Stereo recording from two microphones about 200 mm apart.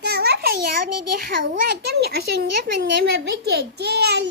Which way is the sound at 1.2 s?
45° right (ahead or behind).